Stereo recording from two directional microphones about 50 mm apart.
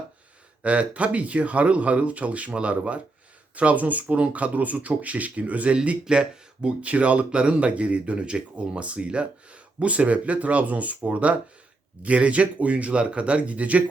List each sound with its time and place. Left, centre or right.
0.6 s speech: right
6.8 s speech: right